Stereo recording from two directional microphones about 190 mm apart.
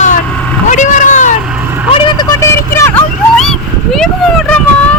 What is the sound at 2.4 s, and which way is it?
Vehicle, 15° left (ahead or behind).